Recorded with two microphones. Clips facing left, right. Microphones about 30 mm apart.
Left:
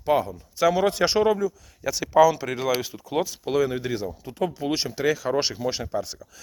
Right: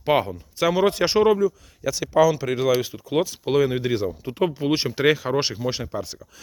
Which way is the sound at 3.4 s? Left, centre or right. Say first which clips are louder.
Right 3 dB; right.